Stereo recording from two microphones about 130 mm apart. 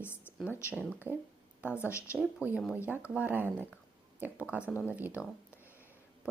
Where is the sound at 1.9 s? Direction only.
20° left (ahead or behind).